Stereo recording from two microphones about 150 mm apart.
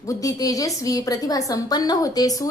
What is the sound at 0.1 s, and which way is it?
A woman's voice, 20° left (ahead or behind).